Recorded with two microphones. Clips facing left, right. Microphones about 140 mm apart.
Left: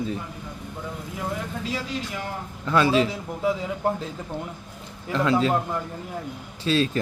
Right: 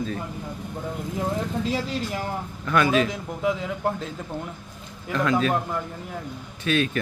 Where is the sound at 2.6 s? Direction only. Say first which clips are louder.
Left 1 dB; 25° left (ahead or behind).